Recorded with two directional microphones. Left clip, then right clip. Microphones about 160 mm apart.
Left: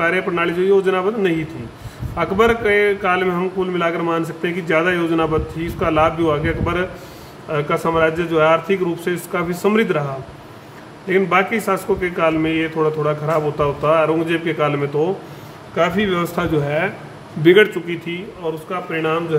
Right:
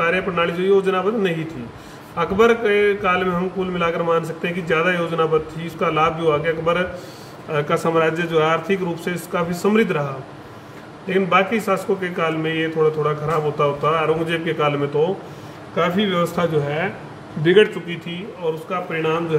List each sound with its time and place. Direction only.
0.0 s a man's voice: 35° left (ahead or behind)
7.5 s a man's voice: 15° left (ahead or behind); by 10.0 s 35° left (ahead or behind)
11.1 s a man's voice: 35° left (ahead or behind)
15.7 s a man's voice: 30° left (ahead or behind)
18.7 s a man's voice: 20° left (ahead or behind)